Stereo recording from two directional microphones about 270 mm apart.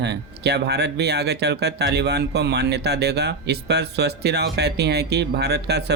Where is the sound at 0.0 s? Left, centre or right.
Right.